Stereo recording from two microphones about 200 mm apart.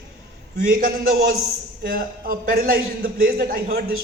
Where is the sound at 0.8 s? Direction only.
45° right (ahead or behind).